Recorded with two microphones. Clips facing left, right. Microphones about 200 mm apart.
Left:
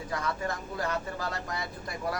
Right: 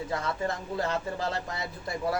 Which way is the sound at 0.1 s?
25° right (ahead or behind).